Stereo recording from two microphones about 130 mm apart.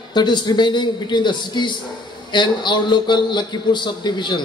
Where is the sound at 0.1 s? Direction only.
35° left (ahead or behind).